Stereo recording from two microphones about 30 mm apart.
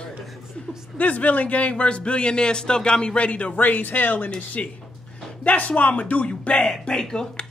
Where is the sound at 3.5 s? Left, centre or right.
Left.